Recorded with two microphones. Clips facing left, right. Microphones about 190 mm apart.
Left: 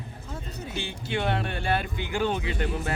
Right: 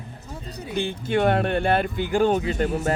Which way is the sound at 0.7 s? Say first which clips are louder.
Right 8 dB; 50° right (ahead or behind).